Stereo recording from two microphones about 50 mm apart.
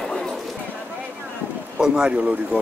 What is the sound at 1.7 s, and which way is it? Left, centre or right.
Speech, centre.